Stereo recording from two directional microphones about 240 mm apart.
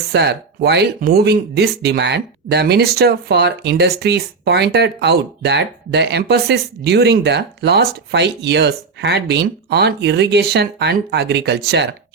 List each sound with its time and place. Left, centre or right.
0.1 s speech: right